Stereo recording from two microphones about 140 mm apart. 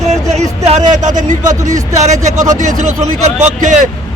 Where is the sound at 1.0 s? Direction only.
65° right (ahead or behind).